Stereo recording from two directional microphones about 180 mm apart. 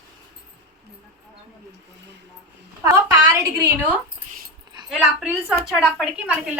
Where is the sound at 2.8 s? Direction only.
20° right (ahead or behind).